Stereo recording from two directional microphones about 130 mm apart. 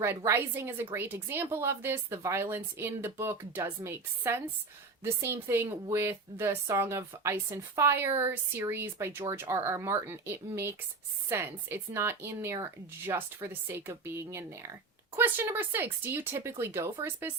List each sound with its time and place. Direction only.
0.3 s a woman's voice: 20° right (ahead or behind)